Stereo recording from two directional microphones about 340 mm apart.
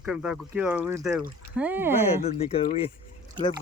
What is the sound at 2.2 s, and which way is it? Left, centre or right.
Speech, centre.